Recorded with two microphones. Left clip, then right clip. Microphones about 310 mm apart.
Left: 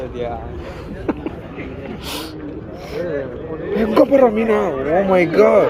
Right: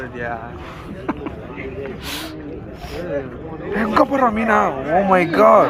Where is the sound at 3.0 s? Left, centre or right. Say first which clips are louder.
Left 2 dB; right.